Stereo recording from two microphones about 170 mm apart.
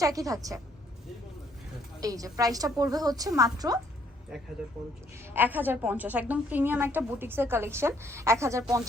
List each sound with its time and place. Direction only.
0.0 s a woman's voice: 20° right (ahead or behind)
2.0 s a woman's voice: 20° right (ahead or behind)
5.3 s a woman's voice: 10° right (ahead or behind)